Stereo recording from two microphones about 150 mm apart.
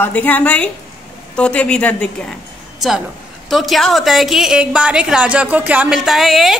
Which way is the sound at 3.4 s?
Centre (ahead or behind).